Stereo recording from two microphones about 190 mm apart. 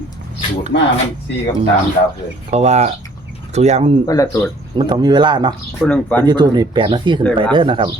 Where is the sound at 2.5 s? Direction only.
35° right (ahead or behind).